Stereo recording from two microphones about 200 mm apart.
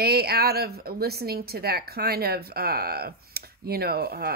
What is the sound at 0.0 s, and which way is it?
Speech, 50° right (ahead or behind).